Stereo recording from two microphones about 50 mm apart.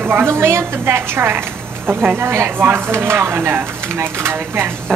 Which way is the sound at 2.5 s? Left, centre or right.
Right.